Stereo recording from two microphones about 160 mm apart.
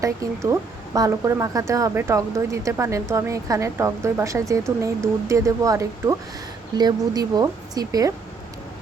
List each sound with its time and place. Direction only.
0.0 s speech: 20° right (ahead or behind)